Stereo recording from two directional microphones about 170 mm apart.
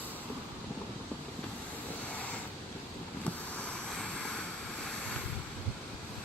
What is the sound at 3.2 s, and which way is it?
Vehicle, 5° left (ahead or behind).